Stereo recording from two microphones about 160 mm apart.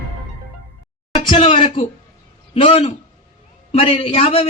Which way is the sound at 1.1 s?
30° left (ahead or behind).